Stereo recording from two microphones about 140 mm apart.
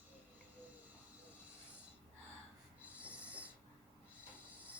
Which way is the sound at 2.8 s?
10° right (ahead or behind).